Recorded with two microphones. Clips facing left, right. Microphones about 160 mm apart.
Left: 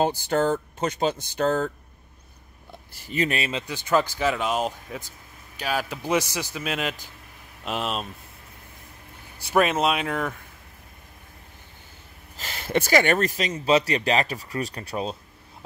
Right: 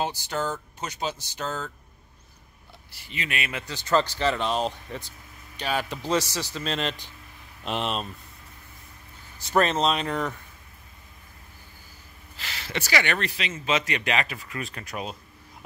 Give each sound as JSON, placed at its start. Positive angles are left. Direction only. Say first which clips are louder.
{"t": 0.0, "sound": "speech", "louder": "left 6 dB", "side_deg": 50}
{"t": 2.9, "sound": "speech", "louder": "left 9 dB", "side_deg": 45}
{"t": 3.5, "sound": "speech", "louder": "right 1 dB", "side_deg": 10}
{"t": 9.4, "sound": "speech", "louder": "left 1 dB", "side_deg": 10}
{"t": 12.4, "sound": "speech", "louder": "left 8 dB", "side_deg": 45}